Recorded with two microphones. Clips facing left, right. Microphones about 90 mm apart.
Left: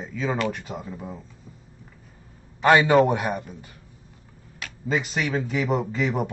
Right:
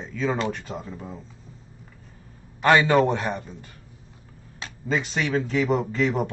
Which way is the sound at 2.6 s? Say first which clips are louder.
Left 1 dB; 10° left (ahead or behind).